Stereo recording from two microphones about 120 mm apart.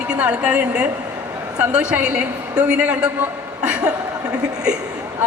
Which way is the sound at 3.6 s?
10° right (ahead or behind).